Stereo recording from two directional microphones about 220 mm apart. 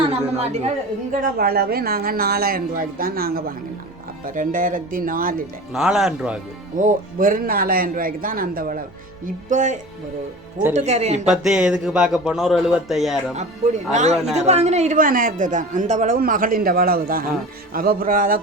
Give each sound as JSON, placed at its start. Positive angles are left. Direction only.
{"t": 0.0, "sound": "chatter", "side_deg": -30}
{"t": 1.4, "sound": "a man's voice", "side_deg": -45}
{"t": 5.7, "sound": "a man's voice", "side_deg": 0}
{"t": 6.7, "sound": "a man's voice", "side_deg": -35}
{"t": 10.8, "sound": "a man's voice", "side_deg": -30}
{"t": 11.3, "sound": "a man's voice", "side_deg": -5}
{"t": 13.3, "sound": "a man's voice", "side_deg": -30}